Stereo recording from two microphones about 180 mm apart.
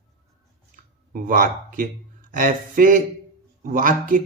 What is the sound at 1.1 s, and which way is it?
Speech, 50° right (ahead or behind).